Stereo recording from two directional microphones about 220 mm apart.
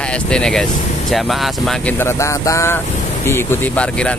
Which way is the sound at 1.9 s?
10° left (ahead or behind).